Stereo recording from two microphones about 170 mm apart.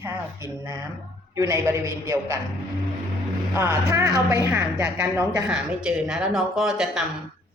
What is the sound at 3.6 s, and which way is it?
A man's voice, 20° right (ahead or behind).